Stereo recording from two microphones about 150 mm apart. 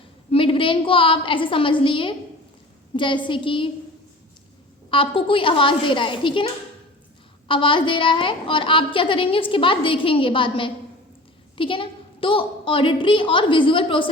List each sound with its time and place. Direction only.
0.3 s a woman's voice: 35° left (ahead or behind)
4.9 s a woman's voice: 35° left (ahead or behind)